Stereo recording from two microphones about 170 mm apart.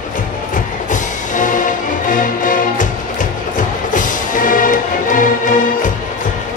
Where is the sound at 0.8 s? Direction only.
50° left (ahead or behind).